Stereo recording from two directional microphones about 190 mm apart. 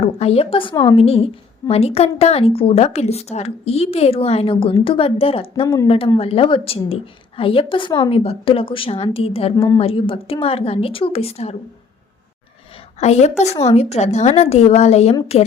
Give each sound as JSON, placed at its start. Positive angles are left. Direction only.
{"t": 0.0, "sound": "a woman's voice", "side_deg": 30}
{"t": 5.6, "sound": "speech", "side_deg": 15}
{"t": 6.1, "sound": "a woman's voice", "side_deg": 30}
{"t": 12.7, "sound": "a woman's voice", "side_deg": 35}